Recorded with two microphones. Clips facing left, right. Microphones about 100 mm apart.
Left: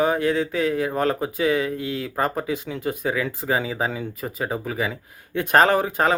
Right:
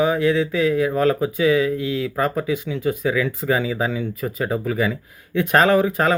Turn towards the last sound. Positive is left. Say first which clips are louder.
# right 2 dB
turn(degrees=25)  # may be behind; listen again after turning